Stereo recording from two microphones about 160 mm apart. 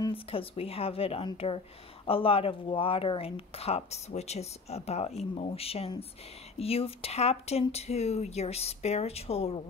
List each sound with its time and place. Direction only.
0.0 s speech: 35° left (ahead or behind)